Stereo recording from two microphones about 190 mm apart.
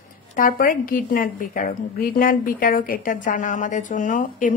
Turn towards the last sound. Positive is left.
turn(degrees=45)  # may be behind; listen again after turning